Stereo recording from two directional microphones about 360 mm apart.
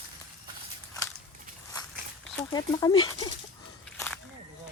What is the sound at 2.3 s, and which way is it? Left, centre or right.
Speech, centre.